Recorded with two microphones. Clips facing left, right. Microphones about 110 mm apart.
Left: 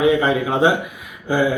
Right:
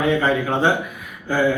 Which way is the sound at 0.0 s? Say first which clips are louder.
Left 2 dB; 15° left (ahead or behind).